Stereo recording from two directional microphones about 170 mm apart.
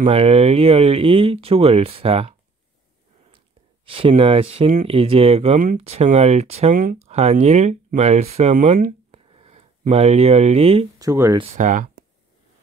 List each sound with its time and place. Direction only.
0.0 s speech: 35° right (ahead or behind)
3.3 s a sound: 30° right (ahead or behind)
4.1 s speech: 35° right (ahead or behind)
11.0 s speech: 20° right (ahead or behind)
11.5 s speech: 45° right (ahead or behind)